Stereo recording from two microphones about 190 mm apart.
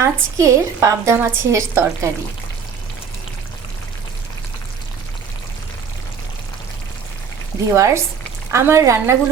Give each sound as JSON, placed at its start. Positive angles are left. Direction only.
{"t": 0.0, "sound": "a woman's voice", "side_deg": -15}
{"t": 7.7, "sound": "a woman's voice", "side_deg": -15}